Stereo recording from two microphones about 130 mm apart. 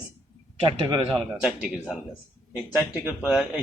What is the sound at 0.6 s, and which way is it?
Speech, 45° right (ahead or behind).